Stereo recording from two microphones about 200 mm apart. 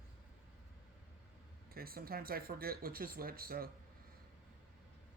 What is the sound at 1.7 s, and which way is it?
Speech, 50° right (ahead or behind).